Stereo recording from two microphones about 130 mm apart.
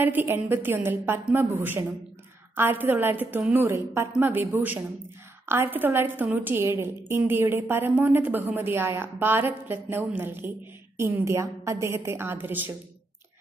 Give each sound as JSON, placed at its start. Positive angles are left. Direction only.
{"t": 0.0, "sound": "a woman's voice", "side_deg": -15}